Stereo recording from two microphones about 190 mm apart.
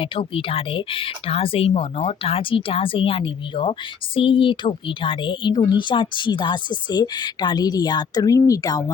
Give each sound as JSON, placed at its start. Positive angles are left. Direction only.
{"t": 0.0, "sound": "speech", "side_deg": 30}